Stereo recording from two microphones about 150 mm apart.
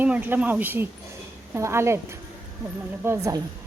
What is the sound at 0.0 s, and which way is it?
A woman's voice, 10° right (ahead or behind).